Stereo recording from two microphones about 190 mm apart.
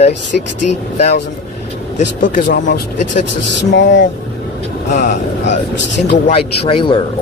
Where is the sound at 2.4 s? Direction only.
70° left (ahead or behind).